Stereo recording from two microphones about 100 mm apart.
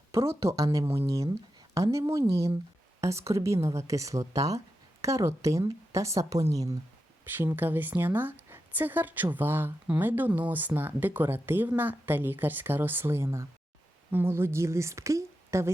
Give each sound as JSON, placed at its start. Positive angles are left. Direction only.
{"t": 0.1, "sound": "speech", "side_deg": -30}
{"t": 7.3, "sound": "a woman's voice", "side_deg": -20}